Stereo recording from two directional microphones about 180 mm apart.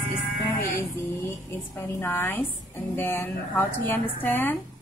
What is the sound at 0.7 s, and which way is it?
A woman's voice, 15° left (ahead or behind).